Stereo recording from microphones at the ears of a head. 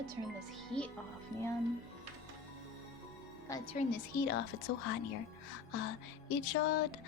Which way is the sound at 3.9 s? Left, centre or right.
Left.